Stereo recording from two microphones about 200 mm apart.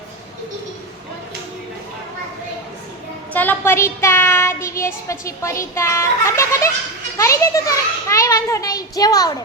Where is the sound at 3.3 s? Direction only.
10° left (ahead or behind).